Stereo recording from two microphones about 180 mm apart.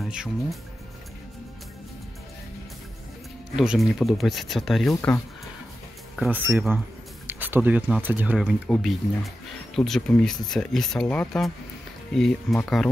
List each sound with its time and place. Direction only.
0.0 s speech: centre (ahead or behind)
3.5 s speech: 5° right (ahead or behind)
6.1 s speech: 5° right (ahead or behind)